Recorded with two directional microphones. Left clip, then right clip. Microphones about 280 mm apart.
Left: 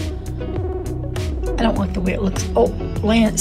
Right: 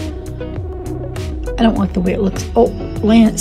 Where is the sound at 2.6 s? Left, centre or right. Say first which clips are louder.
Right 5 dB; centre.